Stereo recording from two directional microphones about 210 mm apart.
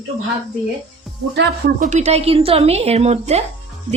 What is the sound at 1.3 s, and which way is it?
Speech, 50° right (ahead or behind).